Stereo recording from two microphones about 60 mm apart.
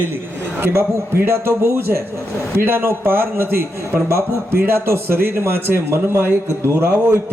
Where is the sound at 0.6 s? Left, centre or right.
Right.